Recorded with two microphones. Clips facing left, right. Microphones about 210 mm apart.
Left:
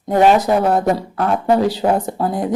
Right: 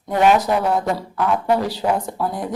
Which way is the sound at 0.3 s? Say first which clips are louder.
Left 4 dB; 20° left (ahead or behind).